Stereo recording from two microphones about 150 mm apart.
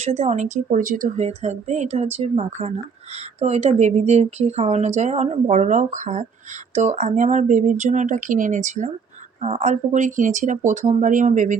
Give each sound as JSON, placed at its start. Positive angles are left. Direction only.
{"t": 0.0, "sound": "speech", "side_deg": -50}